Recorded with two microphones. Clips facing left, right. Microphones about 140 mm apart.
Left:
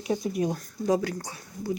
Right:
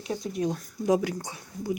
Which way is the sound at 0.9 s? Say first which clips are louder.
Right 1 dB; 15° right (ahead or behind).